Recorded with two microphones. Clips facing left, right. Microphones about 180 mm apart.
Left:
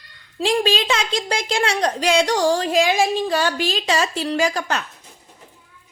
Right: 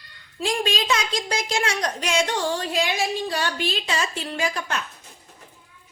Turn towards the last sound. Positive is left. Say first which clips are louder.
# left 5 dB
turn(degrees=80)